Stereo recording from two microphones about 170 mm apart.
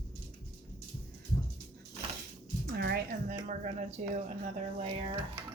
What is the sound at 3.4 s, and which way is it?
Speech, 45° right (ahead or behind).